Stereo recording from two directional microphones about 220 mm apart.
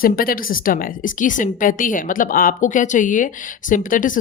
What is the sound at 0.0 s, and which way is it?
A woman's voice, 40° left (ahead or behind).